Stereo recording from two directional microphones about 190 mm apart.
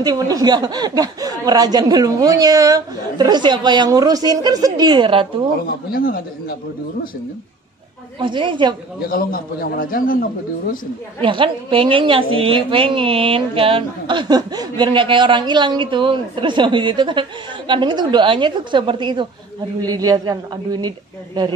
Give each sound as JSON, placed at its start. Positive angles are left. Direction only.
{"t": 0.0, "sound": "a woman's voice", "side_deg": -20}
{"t": 5.7, "sound": "a man's voice", "side_deg": 50}
{"t": 8.2, "sound": "a woman's voice", "side_deg": -25}
{"t": 9.0, "sound": "a man's voice", "side_deg": 50}
{"t": 11.1, "sound": "a woman's voice", "side_deg": -25}